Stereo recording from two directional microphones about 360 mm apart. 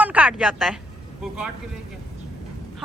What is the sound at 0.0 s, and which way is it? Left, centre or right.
Speech, centre.